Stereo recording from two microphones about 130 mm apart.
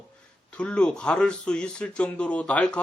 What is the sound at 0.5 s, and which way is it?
Speech, 10° left (ahead or behind).